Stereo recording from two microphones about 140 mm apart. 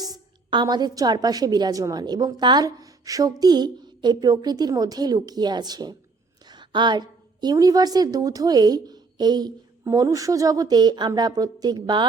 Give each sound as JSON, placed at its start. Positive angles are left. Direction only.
{"t": 0.0, "sound": "a woman's voice", "side_deg": -30}